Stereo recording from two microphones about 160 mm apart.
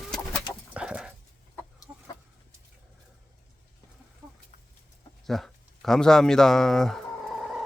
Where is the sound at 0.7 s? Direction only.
5° right (ahead or behind).